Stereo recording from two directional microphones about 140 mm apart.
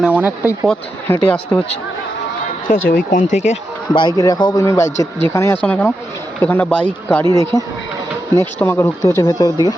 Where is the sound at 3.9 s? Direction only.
30° left (ahead or behind).